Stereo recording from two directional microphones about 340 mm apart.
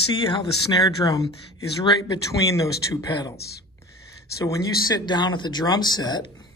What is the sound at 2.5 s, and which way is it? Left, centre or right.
Speech, centre.